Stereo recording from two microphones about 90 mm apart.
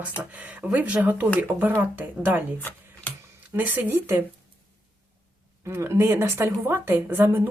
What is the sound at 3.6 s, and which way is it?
Speech, 20° right (ahead or behind).